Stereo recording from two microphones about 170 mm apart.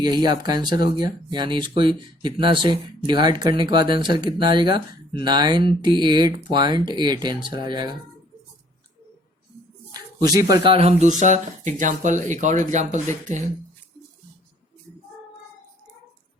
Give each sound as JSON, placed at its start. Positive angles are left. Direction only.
{"t": 0.0, "sound": "speech", "side_deg": -25}
{"t": 9.9, "sound": "speech", "side_deg": -20}
{"t": 11.2, "sound": "speech", "side_deg": -45}